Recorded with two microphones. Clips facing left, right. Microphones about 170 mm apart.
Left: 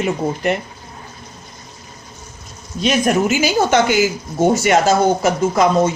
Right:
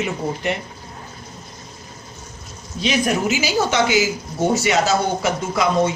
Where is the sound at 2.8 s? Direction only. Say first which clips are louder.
Left 4 dB; 50° left (ahead or behind).